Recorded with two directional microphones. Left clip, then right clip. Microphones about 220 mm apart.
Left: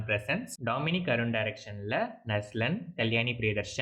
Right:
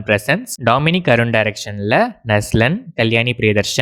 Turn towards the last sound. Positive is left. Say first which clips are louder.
# right 16 dB
turn(degrees=-45)  # may be behind; listen again after turning